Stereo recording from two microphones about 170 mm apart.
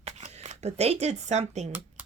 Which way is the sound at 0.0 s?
40° right (ahead or behind).